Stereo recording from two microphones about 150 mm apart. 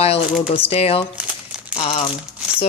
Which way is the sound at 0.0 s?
40° left (ahead or behind).